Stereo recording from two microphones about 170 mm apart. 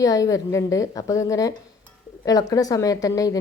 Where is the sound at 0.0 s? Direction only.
20° left (ahead or behind).